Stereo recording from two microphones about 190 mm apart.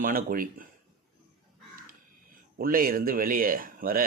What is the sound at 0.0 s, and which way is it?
Speech, 50° right (ahead or behind).